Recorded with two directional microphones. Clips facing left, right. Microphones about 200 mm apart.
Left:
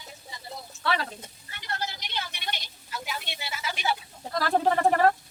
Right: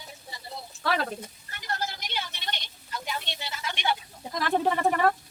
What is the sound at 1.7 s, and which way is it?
Vehicle, 45° right (ahead or behind).